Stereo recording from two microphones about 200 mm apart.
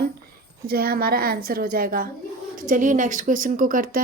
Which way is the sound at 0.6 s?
50° right (ahead or behind).